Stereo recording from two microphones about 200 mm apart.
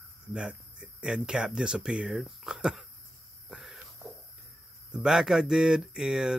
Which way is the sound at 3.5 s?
Centre (ahead or behind).